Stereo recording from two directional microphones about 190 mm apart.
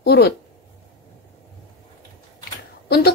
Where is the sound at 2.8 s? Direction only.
55° left (ahead or behind).